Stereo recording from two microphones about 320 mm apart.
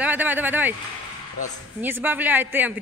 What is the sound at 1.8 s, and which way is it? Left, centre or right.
Speech, centre.